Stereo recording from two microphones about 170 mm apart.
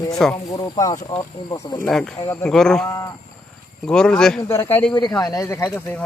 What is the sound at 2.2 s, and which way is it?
Speech, 15° left (ahead or behind).